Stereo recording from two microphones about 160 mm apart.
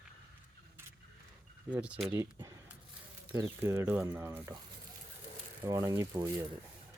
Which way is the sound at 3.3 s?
15° right (ahead or behind).